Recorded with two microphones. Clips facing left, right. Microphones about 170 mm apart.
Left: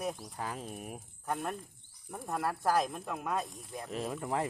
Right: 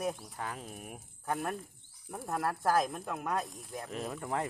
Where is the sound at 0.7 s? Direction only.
25° left (ahead or behind).